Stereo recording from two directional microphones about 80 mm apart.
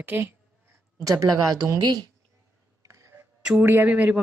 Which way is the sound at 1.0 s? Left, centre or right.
Right.